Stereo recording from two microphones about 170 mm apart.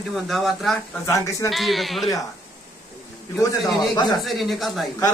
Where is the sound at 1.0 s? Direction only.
20° left (ahead or behind).